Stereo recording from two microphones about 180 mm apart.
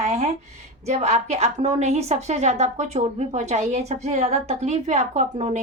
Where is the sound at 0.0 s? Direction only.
40° right (ahead or behind).